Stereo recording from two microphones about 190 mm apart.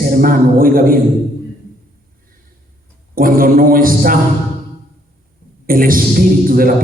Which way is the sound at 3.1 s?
50° right (ahead or behind).